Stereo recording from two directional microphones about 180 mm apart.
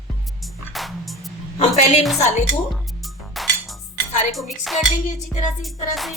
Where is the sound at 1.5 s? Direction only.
40° left (ahead or behind).